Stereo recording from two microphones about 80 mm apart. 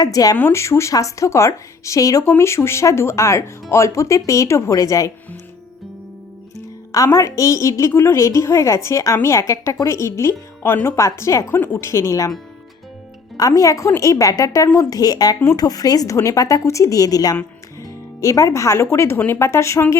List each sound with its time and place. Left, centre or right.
0.0 s a woman's voice: left
0.5 s a woman's voice: left
6.9 s a woman's voice: left
13.3 s a woman's voice: left